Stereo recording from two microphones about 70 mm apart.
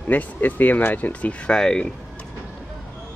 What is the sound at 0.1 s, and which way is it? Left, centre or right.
Speech, left.